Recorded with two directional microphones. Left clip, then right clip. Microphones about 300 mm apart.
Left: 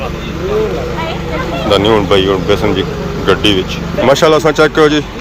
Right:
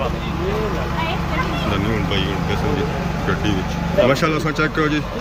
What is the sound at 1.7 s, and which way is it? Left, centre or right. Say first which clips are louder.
Speech: left 17 dB; centre.